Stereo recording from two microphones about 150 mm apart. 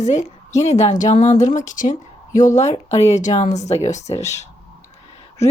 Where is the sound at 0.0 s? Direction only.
50° left (ahead or behind).